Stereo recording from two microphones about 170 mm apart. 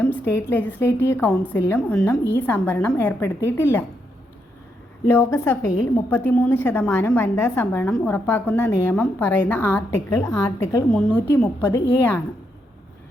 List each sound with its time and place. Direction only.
0.0 s a woman's voice: 10° left (ahead or behind)
5.0 s a woman's voice: 15° left (ahead or behind)